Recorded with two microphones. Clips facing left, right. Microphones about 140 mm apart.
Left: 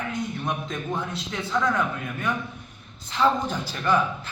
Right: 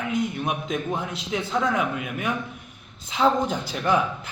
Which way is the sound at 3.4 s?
15° right (ahead or behind).